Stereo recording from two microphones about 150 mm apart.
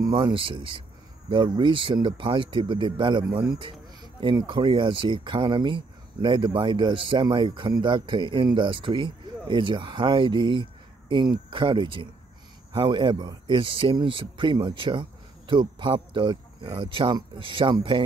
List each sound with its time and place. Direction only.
0.0 s speech: 30° right (ahead or behind)